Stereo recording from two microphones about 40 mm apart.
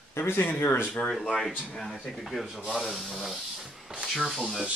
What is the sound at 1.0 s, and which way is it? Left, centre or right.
Speech, centre.